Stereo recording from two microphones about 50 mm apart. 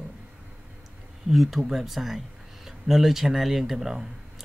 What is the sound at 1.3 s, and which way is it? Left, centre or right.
Speech, centre.